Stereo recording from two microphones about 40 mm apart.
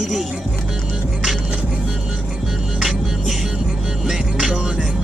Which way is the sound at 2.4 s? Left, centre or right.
Centre.